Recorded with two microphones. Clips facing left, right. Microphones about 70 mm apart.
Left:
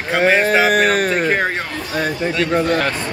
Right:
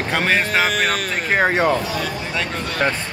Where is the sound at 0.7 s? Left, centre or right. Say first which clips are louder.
Left 6 dB; left.